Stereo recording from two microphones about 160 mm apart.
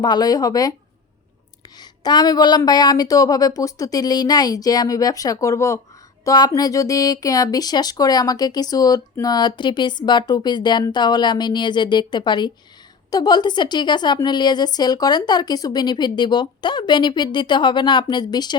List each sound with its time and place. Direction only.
0.0 s speech: 25° left (ahead or behind)
1.8 s speech: 25° left (ahead or behind)